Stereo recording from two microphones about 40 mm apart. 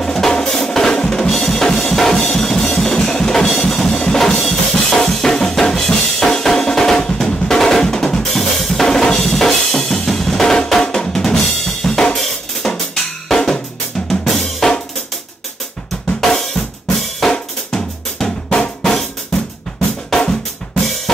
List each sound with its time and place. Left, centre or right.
0.0 s drum: centre
1.7 s music: centre
4.3 s drum kit: centre
8.8 s drum: centre
16.2 s drum kit: centre